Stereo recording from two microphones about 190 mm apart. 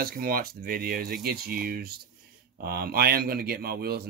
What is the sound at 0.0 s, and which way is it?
A man's voice, 50° right (ahead or behind).